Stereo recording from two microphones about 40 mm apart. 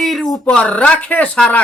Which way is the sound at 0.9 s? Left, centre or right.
Left.